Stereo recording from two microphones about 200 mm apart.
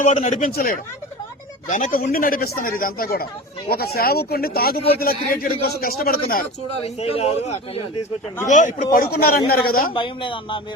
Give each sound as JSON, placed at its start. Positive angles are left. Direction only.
{"t": 0.0, "sound": "a man's voice", "side_deg": 35}
{"t": 6.8, "sound": "a man's voice", "side_deg": 30}
{"t": 9.9, "sound": "speech", "side_deg": 25}